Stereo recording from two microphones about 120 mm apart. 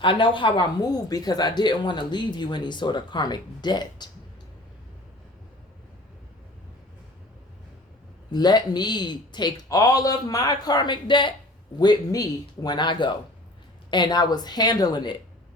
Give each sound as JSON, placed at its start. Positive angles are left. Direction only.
{"t": 0.0, "sound": "speech", "side_deg": 45}
{"t": 8.3, "sound": "speech", "side_deg": 35}